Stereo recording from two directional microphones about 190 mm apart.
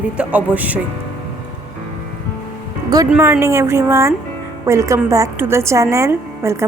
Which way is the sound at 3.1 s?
5° right (ahead or behind).